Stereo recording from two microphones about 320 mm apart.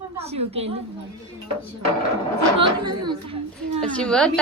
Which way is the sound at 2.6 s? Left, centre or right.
Centre.